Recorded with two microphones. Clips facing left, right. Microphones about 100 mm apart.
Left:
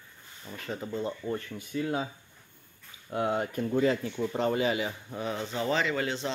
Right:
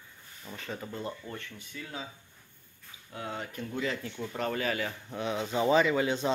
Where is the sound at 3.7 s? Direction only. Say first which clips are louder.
Left 8 dB; 30° left (ahead or behind); by 5.0 s 15° left (ahead or behind).